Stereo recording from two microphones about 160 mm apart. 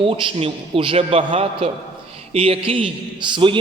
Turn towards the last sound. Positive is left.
turn(degrees=-30)  # may be behind; listen again after turning